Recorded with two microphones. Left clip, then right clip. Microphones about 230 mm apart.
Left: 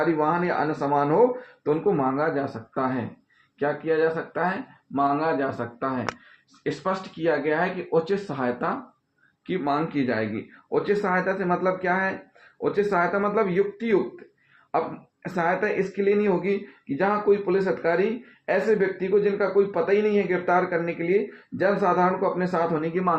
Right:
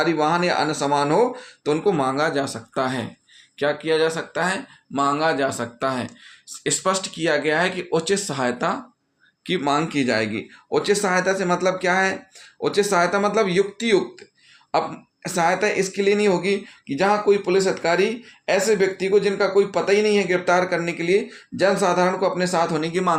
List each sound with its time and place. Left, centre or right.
0.0 s speech: right
0.8 s speech: right
15.2 s speech: right